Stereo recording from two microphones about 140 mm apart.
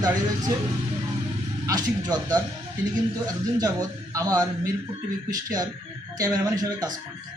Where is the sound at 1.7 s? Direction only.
30° right (ahead or behind).